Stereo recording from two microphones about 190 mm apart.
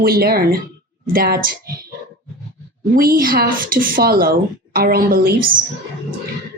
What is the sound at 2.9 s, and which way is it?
A woman's voice, 50° right (ahead or behind).